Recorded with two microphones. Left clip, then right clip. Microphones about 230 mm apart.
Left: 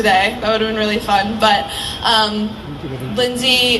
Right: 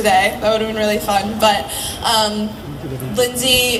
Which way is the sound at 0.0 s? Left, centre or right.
Right.